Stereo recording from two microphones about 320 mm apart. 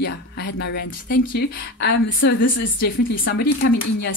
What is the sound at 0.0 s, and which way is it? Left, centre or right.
A woman's voice, left.